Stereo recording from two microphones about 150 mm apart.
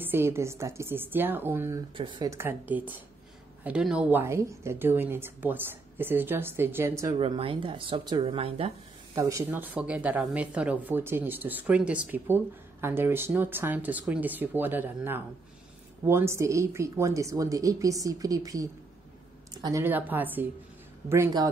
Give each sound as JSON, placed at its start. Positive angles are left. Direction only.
{"t": 0.0, "sound": "a woman's voice", "side_deg": -15}
{"t": 2.0, "sound": "speech", "side_deg": -30}
{"t": 2.3, "sound": "a woman's voice", "side_deg": -15}
{"t": 7.2, "sound": "speech", "side_deg": -40}
{"t": 9.1, "sound": "a woman's voice", "side_deg": -20}
{"t": 19.8, "sound": "a woman's voice", "side_deg": -10}